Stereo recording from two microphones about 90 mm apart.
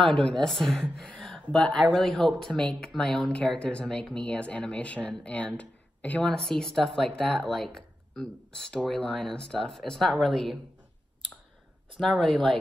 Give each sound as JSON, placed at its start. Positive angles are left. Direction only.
{"t": 0.0, "sound": "speech", "side_deg": 5}
{"t": 5.6, "sound": "a sound", "side_deg": 15}
{"t": 6.2, "sound": "speech", "side_deg": 5}
{"t": 12.0, "sound": "speech", "side_deg": 5}